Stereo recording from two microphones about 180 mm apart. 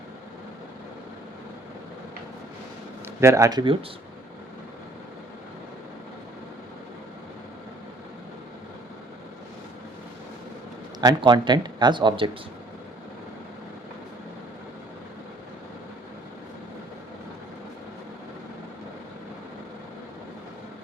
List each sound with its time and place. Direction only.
3.2 s speech: 15° right (ahead or behind)
11.0 s speech: 25° right (ahead or behind)